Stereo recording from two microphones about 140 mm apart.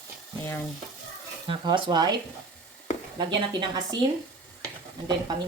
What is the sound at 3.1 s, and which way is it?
Speech, 35° right (ahead or behind).